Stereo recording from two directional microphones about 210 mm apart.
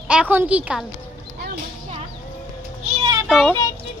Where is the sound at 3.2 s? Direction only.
Centre (ahead or behind).